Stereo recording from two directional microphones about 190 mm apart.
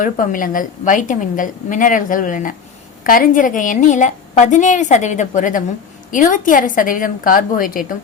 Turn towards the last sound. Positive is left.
turn(degrees=50)  # may be behind; listen again after turning